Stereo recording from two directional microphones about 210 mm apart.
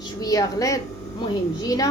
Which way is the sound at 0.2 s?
15° left (ahead or behind).